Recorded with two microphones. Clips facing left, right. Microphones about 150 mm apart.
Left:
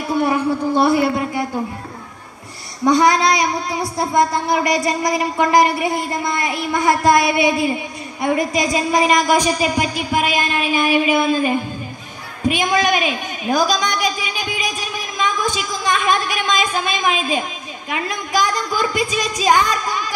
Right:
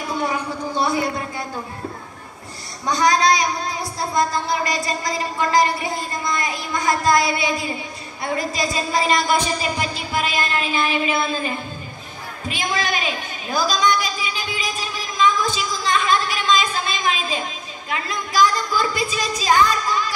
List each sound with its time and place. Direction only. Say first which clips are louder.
0.2 s a man's voice: left 9 dB; 60° left (ahead or behind)
1.1 s a man's voice: left 7 dB; 25° left (ahead or behind)
2.8 s a woman's voice: left 4 dB; 25° left (ahead or behind)